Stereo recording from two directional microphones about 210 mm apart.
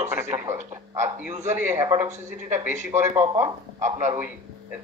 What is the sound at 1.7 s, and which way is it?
Speech, 10° right (ahead or behind).